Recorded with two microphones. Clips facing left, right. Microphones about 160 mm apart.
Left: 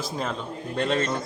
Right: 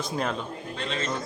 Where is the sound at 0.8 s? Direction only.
50° left (ahead or behind).